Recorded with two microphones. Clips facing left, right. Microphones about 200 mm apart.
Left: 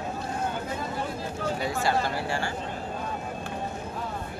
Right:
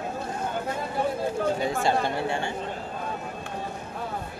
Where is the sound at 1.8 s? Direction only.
20° right (ahead or behind).